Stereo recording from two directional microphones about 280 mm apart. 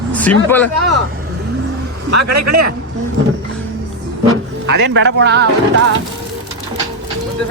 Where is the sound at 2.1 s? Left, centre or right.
Right.